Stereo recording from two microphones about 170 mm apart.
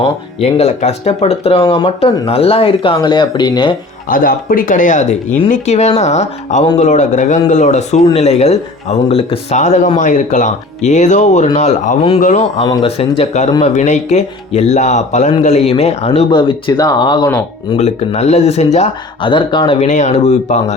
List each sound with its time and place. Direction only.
0.0 s speech: 35° left (ahead or behind)
1.6 s speech: 25° left (ahead or behind)
4.1 s speech: 55° left (ahead or behind)
12.6 s speech: 25° left (ahead or behind)
16.3 s speech: 30° left (ahead or behind)
17.7 s speech: 40° left (ahead or behind)
19.9 s speech: 45° left (ahead or behind)